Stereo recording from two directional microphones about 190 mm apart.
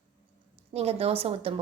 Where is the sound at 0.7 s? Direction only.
30° right (ahead or behind).